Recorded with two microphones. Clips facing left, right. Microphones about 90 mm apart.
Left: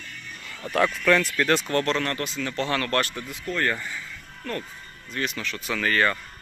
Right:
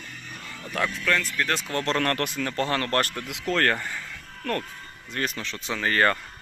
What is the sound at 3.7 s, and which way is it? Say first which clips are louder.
Speech: right 2 dB; 55° right (ahead or behind).